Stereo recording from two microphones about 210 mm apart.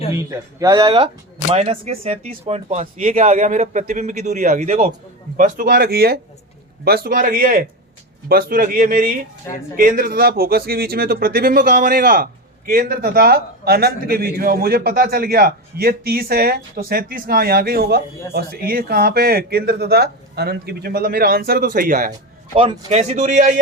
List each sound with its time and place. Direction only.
0.6 s speech: 20° right (ahead or behind); by 22.1 s 40° right (ahead or behind)
22.5 s speech: 25° right (ahead or behind)